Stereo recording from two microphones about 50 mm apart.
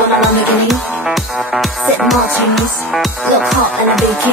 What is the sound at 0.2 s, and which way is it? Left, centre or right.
Music, centre.